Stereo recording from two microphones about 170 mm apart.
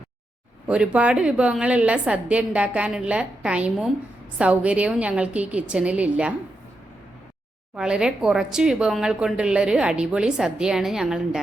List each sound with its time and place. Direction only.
0.7 s a woman's voice: 5° right (ahead or behind)
7.8 s speech: 5° right (ahead or behind)